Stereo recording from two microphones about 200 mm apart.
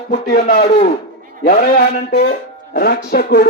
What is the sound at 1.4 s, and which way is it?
Speech, 50° left (ahead or behind).